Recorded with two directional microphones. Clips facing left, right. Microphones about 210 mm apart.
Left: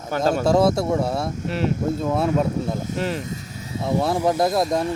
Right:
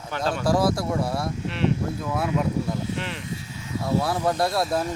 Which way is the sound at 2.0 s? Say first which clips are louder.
Left 5 dB; 25° left (ahead or behind).